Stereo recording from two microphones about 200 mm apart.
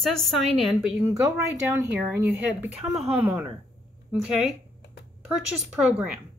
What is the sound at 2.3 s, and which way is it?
Speech, 5° right (ahead or behind).